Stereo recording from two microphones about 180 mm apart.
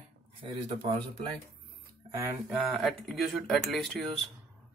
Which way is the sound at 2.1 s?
15° right (ahead or behind).